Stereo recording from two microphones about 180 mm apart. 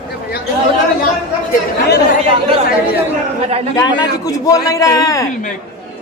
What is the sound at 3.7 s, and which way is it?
A man's voice, 20° left (ahead or behind).